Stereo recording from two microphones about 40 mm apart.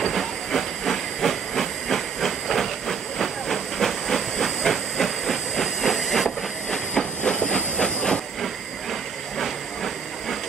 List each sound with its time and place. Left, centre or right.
0.1 s hiss: centre
6.7 s hiss: centre